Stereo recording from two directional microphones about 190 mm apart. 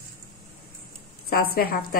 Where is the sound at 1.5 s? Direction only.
55° left (ahead or behind).